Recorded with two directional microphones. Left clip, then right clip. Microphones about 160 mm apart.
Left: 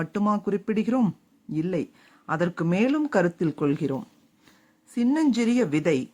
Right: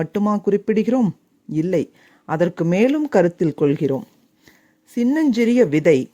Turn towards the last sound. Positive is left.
turn(degrees=-35)  # may be behind; listen again after turning